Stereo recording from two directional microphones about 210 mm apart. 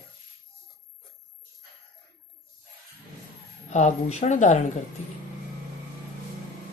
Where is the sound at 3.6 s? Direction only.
35° left (ahead or behind).